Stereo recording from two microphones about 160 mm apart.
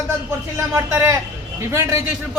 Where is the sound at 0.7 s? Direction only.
20° right (ahead or behind).